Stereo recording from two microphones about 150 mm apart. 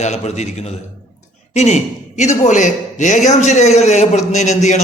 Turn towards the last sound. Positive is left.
turn(degrees=50)  # may be behind; listen again after turning